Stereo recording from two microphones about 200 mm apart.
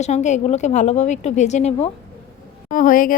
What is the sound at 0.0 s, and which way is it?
A woman's voice, 35° left (ahead or behind).